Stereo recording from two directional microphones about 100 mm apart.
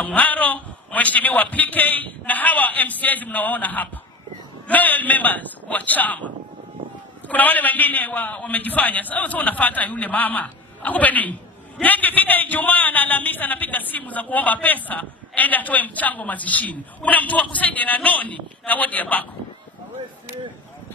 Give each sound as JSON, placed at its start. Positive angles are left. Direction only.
{"t": 0.0, "sound": "a man's voice", "side_deg": 15}